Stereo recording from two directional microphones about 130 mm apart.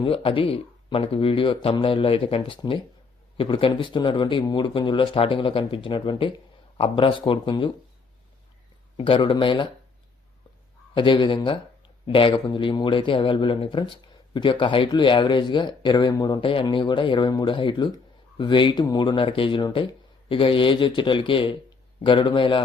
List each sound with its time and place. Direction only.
0.0 s speech: 45° left (ahead or behind)
9.0 s speech: 40° left (ahead or behind)
10.9 s speech: 40° left (ahead or behind)